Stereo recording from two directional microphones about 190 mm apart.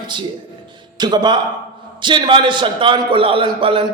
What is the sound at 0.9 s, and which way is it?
A man's voice, 20° right (ahead or behind).